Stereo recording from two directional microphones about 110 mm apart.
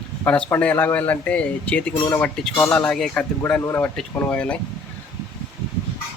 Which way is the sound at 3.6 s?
20° left (ahead or behind).